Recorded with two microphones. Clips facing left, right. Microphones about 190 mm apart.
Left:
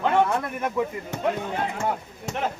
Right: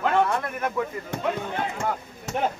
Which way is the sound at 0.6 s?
10° left (ahead or behind).